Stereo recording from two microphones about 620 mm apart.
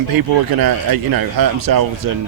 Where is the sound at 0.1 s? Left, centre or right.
Right.